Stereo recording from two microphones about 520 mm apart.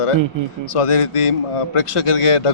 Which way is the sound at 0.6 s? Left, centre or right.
Left.